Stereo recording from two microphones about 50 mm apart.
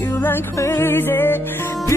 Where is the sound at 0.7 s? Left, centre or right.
Left.